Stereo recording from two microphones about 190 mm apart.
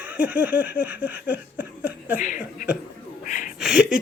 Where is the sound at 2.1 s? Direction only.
45° left (ahead or behind).